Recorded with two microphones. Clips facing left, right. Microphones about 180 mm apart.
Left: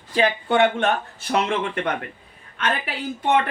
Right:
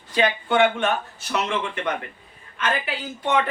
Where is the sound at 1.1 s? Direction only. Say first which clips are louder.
Left 4 dB; 55° left (ahead or behind).